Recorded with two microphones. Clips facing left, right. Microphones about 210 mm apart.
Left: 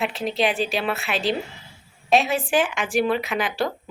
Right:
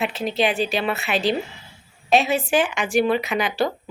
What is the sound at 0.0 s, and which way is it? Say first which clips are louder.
Speech: right 1 dB; centre (ahead or behind).